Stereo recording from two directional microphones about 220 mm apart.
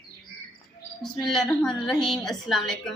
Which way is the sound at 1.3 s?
Centre (ahead or behind).